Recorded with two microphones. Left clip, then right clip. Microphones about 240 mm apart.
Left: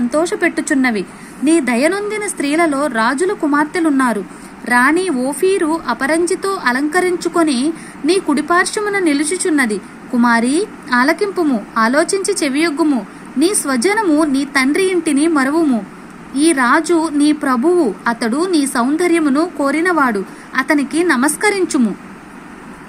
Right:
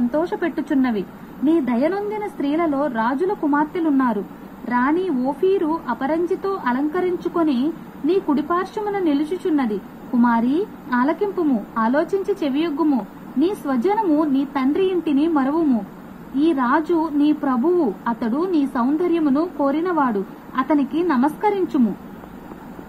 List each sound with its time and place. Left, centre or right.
0.1 s a woman's voice: left